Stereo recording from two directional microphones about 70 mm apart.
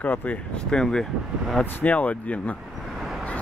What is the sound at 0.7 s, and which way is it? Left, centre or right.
Speech, centre.